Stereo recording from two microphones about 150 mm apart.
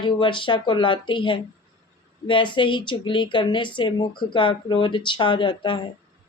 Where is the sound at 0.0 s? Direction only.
35° left (ahead or behind).